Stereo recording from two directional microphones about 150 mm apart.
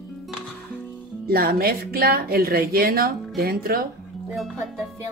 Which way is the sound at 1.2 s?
85° right.